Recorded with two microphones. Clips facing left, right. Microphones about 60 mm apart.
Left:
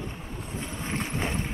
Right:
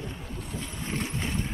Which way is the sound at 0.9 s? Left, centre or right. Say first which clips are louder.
Left 1 dB; left.